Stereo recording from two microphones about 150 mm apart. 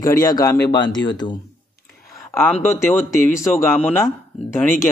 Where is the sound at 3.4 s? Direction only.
15° left (ahead or behind).